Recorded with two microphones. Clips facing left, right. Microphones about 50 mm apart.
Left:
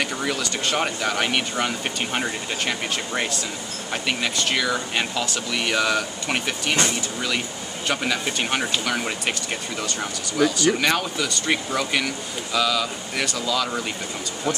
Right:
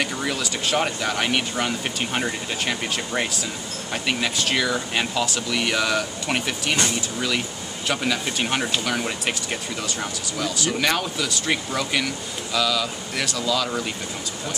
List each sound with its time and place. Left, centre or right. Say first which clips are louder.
0.0 s speech: even; centre